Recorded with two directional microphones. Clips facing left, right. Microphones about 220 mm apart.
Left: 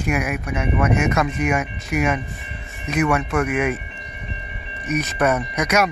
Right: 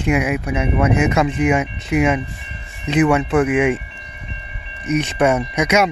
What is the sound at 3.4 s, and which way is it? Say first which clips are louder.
Speech: right 5 dB; 30° right (ahead or behind).